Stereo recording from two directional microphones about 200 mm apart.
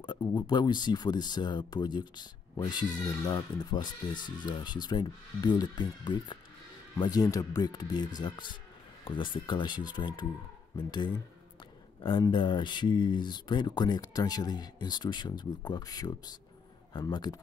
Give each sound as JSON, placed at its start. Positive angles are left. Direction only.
{"t": 0.0, "sound": "speech", "side_deg": 20}